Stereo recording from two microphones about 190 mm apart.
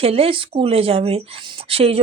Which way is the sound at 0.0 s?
30° right (ahead or behind).